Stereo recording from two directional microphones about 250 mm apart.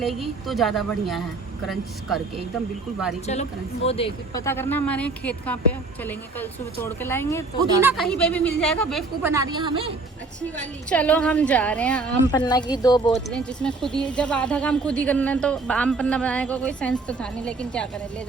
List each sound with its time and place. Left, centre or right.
0.0 s speech: centre
3.8 s speech: left
4.4 s speech: centre
7.8 s speech: centre
9.3 s a woman's voice: centre
10.6 s speech: centre
12.3 s speech: centre
13.1 s speech: centre